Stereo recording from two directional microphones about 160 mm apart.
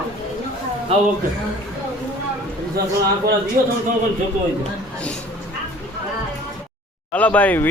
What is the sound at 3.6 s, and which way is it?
Speech, 60° right (ahead or behind).